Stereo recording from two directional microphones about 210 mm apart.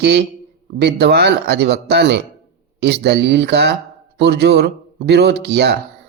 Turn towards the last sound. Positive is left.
turn(degrees=-50)  # may be behind; listen again after turning